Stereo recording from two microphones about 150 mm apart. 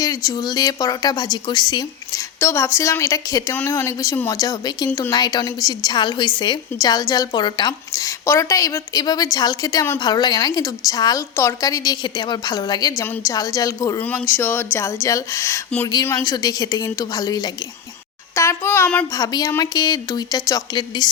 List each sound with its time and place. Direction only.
0.0 s a woman's voice: 25° left (ahead or behind)
14.0 s a woman's voice: 10° left (ahead or behind)
19.1 s a woman's voice: 25° left (ahead or behind)